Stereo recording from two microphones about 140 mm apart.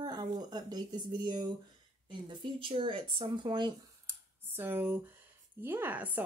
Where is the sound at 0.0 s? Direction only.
30° right (ahead or behind).